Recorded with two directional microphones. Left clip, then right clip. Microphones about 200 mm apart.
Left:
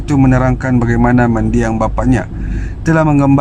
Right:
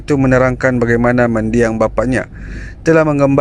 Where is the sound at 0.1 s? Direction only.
25° right (ahead or behind).